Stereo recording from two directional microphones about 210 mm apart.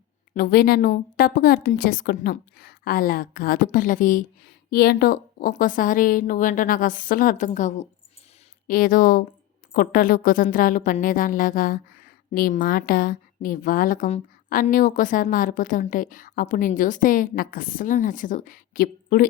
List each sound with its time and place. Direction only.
0.3 s a woman's voice: 45° left (ahead or behind)